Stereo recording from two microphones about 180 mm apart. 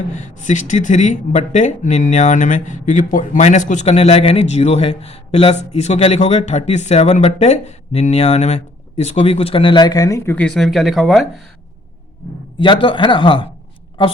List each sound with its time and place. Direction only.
0.2 s speech: 40° left (ahead or behind); by 11.4 s centre (ahead or behind)
12.5 s speech: 25° left (ahead or behind)